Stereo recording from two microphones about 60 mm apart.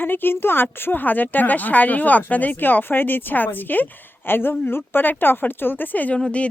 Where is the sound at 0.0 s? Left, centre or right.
Left.